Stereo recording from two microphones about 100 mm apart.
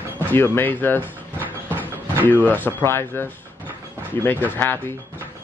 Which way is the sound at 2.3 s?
20° left (ahead or behind).